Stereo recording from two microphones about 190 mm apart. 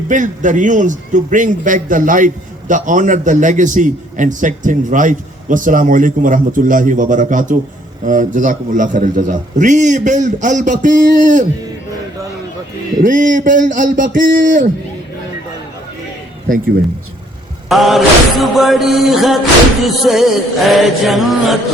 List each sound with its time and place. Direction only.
0.1 s a man's voice: 40° right (ahead or behind)
13.0 s a man's voice: 45° right (ahead or behind)
17.7 s music: centre (ahead or behind)